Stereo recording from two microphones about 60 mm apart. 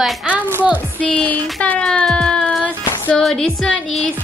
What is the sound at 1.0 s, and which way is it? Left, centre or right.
Child singing, left.